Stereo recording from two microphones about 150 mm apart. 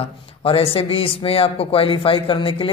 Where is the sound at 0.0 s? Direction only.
40° left (ahead or behind).